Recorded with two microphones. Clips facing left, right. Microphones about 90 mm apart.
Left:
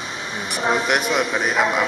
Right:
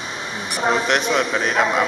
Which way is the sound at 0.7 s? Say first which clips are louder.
Right 1 dB; 10° left (ahead or behind).